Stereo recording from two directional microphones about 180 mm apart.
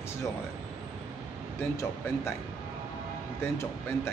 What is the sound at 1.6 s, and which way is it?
Speech, 15° left (ahead or behind).